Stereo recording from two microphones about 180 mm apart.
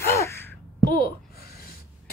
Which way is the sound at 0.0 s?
15° left (ahead or behind).